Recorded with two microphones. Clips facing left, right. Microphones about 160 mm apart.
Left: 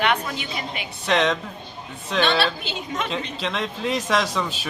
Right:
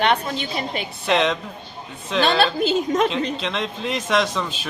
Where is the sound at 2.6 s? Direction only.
40° right (ahead or behind).